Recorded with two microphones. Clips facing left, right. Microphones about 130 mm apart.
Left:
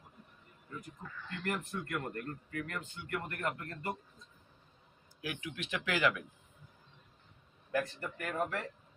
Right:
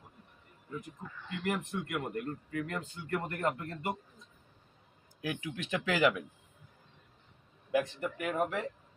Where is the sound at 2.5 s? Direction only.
25° right (ahead or behind).